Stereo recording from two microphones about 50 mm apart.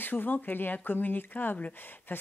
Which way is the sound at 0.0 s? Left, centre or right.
Left.